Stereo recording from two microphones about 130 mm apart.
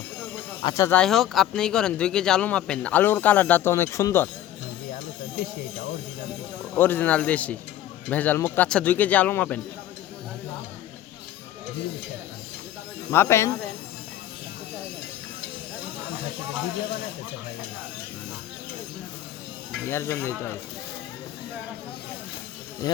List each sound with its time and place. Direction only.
0.6 s speech: 25° left (ahead or behind)
0.9 s speech: 5° left (ahead or behind)
6.7 s speech: 15° left (ahead or behind)
13.1 s speech: 20° left (ahead or behind)
19.9 s speech: 20° left (ahead or behind)